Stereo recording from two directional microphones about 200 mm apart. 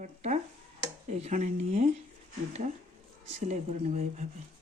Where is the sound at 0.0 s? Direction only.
35° right (ahead or behind).